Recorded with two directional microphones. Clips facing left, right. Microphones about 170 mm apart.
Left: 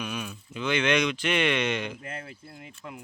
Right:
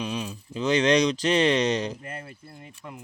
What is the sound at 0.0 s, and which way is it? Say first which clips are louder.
Speech: right 4 dB; 30° right (ahead or behind).